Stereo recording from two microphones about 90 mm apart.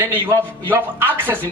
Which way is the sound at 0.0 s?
25° right (ahead or behind).